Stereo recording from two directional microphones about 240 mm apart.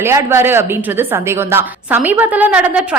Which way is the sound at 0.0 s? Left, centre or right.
Centre.